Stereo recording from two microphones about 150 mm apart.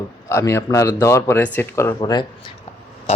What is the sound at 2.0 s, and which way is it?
Speech, 30° left (ahead or behind).